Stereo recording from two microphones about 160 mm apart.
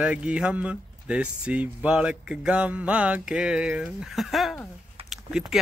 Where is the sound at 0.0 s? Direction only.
5° right (ahead or behind).